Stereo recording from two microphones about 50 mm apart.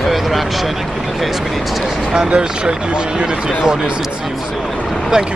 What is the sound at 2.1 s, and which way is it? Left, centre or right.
Speech, centre.